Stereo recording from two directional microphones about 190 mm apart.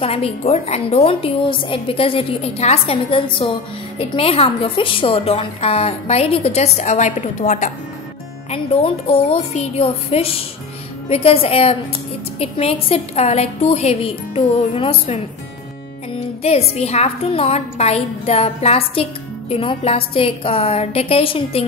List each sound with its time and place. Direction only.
0.0 s a woman's voice: 30° left (ahead or behind)
16.4 s a woman's voice: 35° left (ahead or behind)